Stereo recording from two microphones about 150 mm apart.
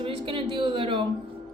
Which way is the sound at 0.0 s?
35° right (ahead or behind).